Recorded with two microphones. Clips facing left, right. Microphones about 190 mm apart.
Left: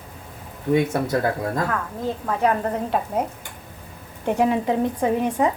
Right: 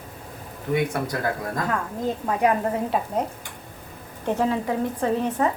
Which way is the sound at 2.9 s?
Centre (ahead or behind).